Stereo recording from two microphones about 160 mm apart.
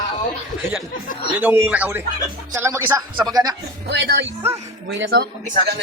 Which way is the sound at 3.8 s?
90° right.